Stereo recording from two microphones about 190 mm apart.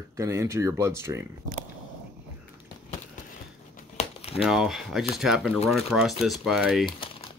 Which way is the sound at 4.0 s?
35° left (ahead or behind).